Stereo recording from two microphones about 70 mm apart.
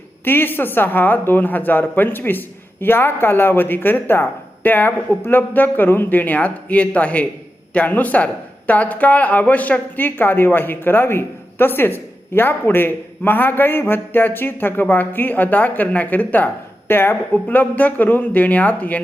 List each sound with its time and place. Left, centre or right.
0.3 s speech: left